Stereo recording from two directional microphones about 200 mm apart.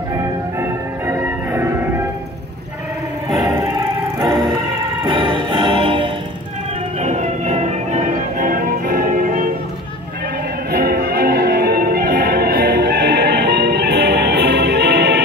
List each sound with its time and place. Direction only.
0.6 s music: 10° right (ahead or behind)
3.4 s music: 20° right (ahead or behind)
5.0 s music: 25° right (ahead or behind); by 9.5 s 45° right (ahead or behind)
10.7 s music: 50° right (ahead or behind)